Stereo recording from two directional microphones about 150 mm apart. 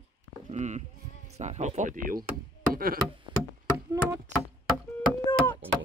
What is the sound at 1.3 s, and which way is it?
Speech, 50° right (ahead or behind).